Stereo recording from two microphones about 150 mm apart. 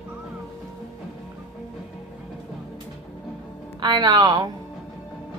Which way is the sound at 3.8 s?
30° right (ahead or behind).